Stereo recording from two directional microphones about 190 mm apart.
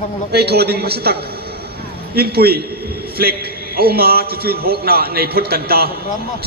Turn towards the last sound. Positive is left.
turn(degrees=-55)  # may be behind; listen again after turning